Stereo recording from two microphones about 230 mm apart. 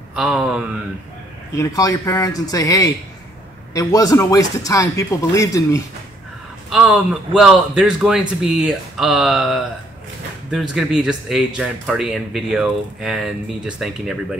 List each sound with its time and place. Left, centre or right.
0.1 s speech: centre
1.6 s speech: centre
6.7 s speech: centre